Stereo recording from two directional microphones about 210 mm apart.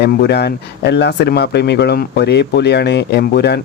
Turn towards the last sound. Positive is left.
turn(degrees=50)  # may be behind; listen again after turning